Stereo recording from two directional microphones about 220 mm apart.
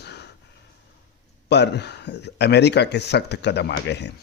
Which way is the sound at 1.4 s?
50° left (ahead or behind).